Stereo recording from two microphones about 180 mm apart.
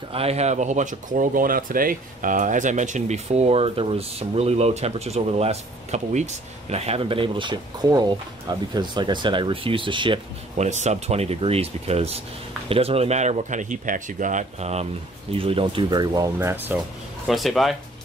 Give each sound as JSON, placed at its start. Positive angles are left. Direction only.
{"t": 0.1, "sound": "speech", "side_deg": -35}
{"t": 10.7, "sound": "speech", "side_deg": -40}
{"t": 17.3, "sound": "speech", "side_deg": 0}